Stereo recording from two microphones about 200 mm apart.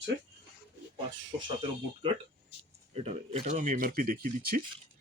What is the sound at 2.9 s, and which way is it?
Speech, 30° right (ahead or behind).